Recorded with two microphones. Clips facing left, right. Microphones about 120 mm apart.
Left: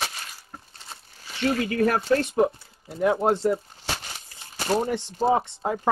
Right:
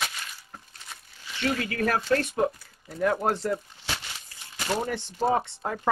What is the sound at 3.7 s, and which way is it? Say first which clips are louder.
Crumpling: left 3 dB; 40° left (ahead or behind).